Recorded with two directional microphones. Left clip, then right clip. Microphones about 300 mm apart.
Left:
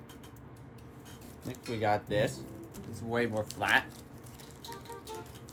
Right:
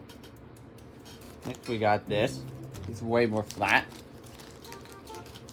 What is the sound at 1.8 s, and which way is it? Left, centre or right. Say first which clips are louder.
Speech: right 3 dB; right.